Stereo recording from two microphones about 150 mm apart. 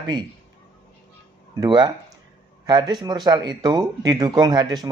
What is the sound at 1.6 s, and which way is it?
Speech, 30° right (ahead or behind).